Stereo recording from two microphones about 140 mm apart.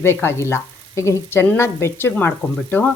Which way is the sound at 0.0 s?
20° left (ahead or behind).